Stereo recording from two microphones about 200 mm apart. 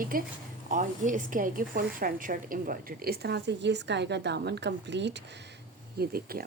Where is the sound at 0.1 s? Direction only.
45° right (ahead or behind); by 5.2 s 60° right (ahead or behind).